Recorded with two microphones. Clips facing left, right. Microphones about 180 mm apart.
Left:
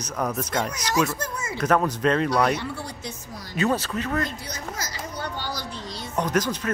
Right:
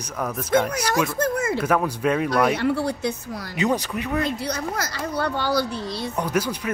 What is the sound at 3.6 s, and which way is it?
Speech, 15° right (ahead or behind).